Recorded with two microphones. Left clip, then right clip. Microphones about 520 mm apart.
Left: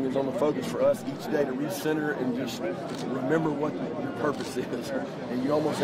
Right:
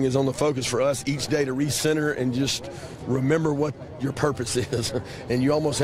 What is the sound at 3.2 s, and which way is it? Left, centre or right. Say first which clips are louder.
Speech: right 3 dB; right.